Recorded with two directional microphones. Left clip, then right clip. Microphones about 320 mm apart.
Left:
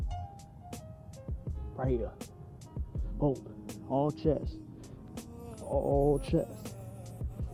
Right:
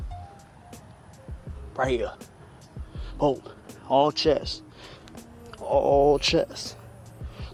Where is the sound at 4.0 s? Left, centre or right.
Centre.